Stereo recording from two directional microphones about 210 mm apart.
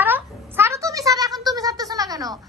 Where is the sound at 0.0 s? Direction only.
10° right (ahead or behind).